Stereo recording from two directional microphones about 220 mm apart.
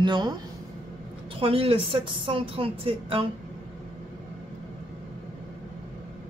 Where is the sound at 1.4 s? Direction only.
25° right (ahead or behind).